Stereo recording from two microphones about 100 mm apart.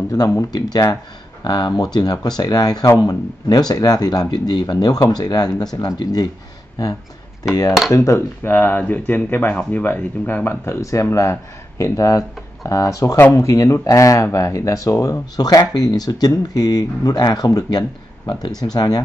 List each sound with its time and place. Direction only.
0.1 s speech: 35° left (ahead or behind)
7.9 s speech: 35° left (ahead or behind)
8.5 s speech: 20° left (ahead or behind); by 18.9 s 40° left (ahead or behind)